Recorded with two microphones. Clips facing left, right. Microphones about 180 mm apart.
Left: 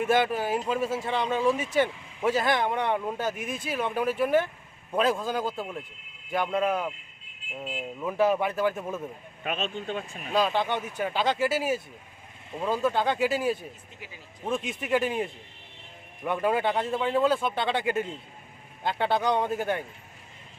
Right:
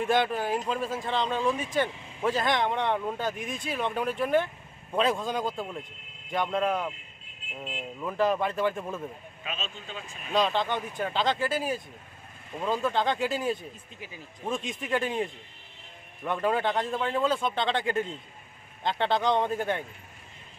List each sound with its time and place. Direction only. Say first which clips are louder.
0.0 s speech: left 1 dB; 10° left (ahead or behind)
9.4 s speech: left 7 dB; 55° left (ahead or behind)
10.3 s speech: left 1 dB; 10° left (ahead or behind)